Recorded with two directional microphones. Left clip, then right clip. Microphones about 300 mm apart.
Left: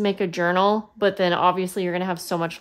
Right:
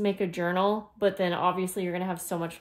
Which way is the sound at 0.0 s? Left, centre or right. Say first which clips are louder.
Left 6 dB; left.